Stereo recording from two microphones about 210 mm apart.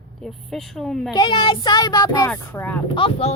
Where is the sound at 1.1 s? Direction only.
20° left (ahead or behind).